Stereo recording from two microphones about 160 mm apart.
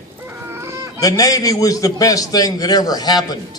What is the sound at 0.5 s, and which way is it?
Chicken, 20° right (ahead or behind).